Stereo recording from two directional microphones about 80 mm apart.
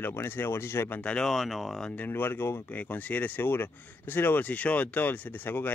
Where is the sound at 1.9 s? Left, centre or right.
Left.